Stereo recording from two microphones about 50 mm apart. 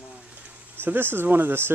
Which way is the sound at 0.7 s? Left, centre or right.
Right.